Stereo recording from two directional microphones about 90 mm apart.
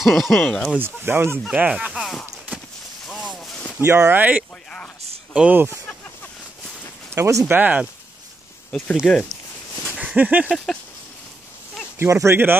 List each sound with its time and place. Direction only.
0.0 s speech: centre (ahead or behind)
0.7 s speech: 25° right (ahead or behind)
1.5 s speech: 10° right (ahead or behind)
2.0 s clip-clop: centre (ahead or behind)
3.1 s a sound: centre (ahead or behind)
3.8 s speech: 30° right (ahead or behind)
4.2 s speech: 20° right (ahead or behind)
7.2 s speech: 35° right (ahead or behind)
7.4 s speech: 20° right (ahead or behind)
9.0 s speech: 5° left (ahead or behind)
9.9 s a sound: 15° right (ahead or behind)
10.5 s speech: centre (ahead or behind)
12.0 s speech: 30° right (ahead or behind)